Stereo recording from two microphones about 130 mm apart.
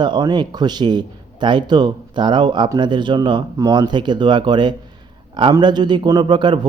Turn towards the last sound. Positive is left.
turn(degrees=-35)  # may be behind; listen again after turning